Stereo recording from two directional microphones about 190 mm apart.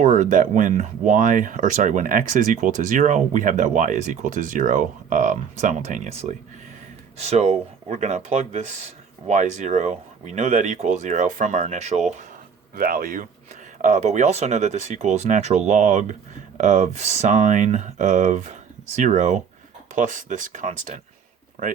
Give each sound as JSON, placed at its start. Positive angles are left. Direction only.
{"t": 0.0, "sound": "speech", "side_deg": -40}
{"t": 12.7, "sound": "speech", "side_deg": -45}